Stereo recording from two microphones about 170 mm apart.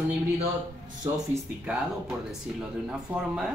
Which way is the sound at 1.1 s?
15° right (ahead or behind).